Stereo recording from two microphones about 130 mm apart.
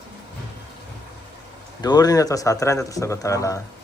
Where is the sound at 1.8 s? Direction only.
30° left (ahead or behind).